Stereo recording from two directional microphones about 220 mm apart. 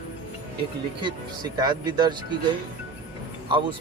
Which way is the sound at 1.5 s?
20° right (ahead or behind).